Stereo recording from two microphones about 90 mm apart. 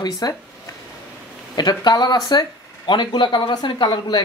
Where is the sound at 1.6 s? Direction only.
50° left (ahead or behind).